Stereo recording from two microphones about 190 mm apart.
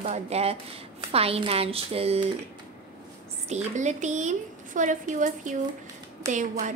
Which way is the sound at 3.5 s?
40° right (ahead or behind).